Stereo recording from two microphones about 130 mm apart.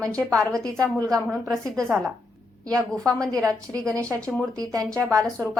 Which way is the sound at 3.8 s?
25° right (ahead or behind).